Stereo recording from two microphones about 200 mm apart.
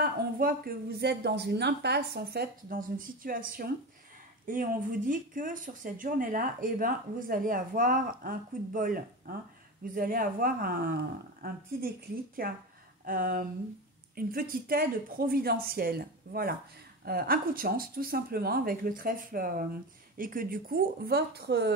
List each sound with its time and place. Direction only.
0.0 s speech: 45° right (ahead or behind)